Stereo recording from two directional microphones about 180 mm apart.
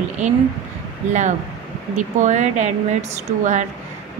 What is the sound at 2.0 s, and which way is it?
A woman's voice, 40° right (ahead or behind).